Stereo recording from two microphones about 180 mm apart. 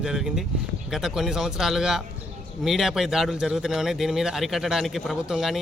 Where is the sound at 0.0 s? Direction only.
Centre (ahead or behind).